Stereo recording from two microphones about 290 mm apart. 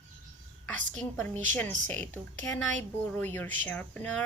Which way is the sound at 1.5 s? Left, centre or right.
Centre.